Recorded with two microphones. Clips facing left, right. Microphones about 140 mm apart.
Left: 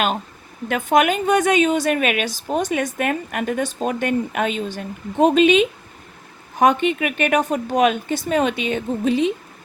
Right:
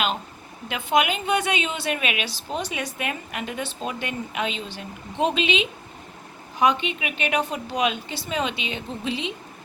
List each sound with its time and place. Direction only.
0.7 s a woman's voice: 45° left (ahead or behind)